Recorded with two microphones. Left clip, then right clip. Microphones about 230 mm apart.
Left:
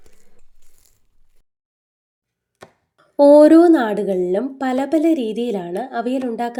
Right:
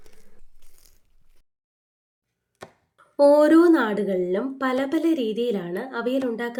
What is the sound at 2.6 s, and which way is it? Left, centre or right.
Chopping, centre.